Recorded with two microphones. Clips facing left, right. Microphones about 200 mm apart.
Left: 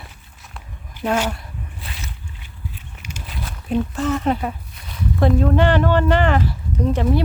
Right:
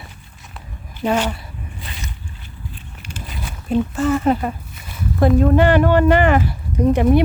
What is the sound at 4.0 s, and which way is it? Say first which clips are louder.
Speech: right 3 dB; centre (ahead or behind).